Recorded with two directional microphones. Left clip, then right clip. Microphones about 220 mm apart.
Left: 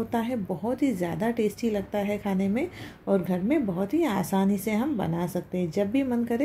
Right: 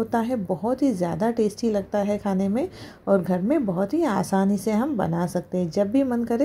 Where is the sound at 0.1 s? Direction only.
25° right (ahead or behind).